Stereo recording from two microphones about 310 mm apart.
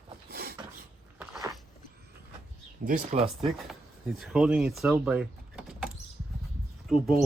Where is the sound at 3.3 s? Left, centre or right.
Centre.